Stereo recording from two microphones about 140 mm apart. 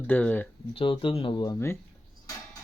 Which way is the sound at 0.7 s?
40° left (ahead or behind).